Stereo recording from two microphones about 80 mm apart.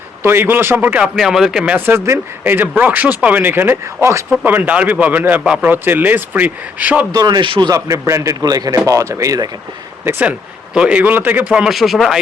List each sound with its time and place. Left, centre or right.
0.2 s speech: right
1.0 s speech: centre
1.7 s speech: right
7.1 s speech: right
7.7 s a man's voice: right
8.9 s speech: right
10.8 s speech: centre
11.5 s speech: centre